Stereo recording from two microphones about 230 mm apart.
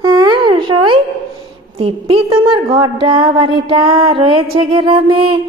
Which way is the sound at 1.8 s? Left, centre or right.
Right.